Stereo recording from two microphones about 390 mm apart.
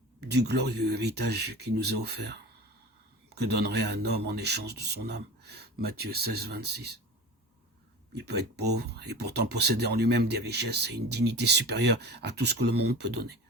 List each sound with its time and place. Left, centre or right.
0.2 s speech: right
8.1 s speech: right